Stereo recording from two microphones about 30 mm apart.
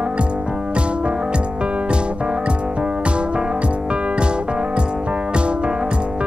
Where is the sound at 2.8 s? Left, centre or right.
Right.